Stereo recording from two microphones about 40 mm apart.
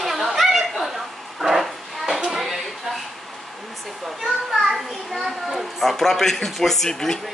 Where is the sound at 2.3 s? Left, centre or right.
Centre.